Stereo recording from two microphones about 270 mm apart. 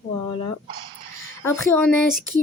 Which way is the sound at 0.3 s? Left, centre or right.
Centre.